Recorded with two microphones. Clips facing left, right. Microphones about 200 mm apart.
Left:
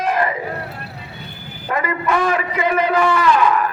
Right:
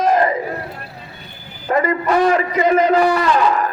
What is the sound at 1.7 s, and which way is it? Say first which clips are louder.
A man's voice: right 4 dB; 40° right (ahead or behind).